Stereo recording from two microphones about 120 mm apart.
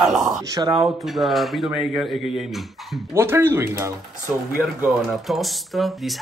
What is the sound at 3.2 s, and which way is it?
Speech, 20° right (ahead or behind).